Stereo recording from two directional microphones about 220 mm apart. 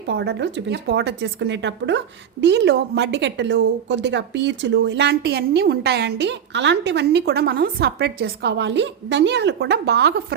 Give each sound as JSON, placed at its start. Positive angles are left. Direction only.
{"t": 0.1, "sound": "a woman's voice", "side_deg": -50}